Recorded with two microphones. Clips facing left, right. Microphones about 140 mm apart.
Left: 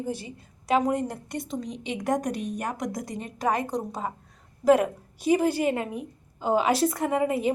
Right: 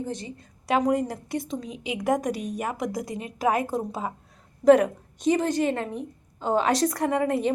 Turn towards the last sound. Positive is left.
turn(degrees=5)  # may be behind; listen again after turning